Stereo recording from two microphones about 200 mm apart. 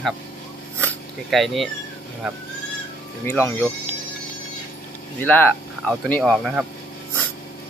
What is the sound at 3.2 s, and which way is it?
Speech, 10° left (ahead or behind).